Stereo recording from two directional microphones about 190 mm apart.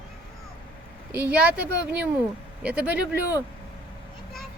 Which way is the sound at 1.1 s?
10° right (ahead or behind).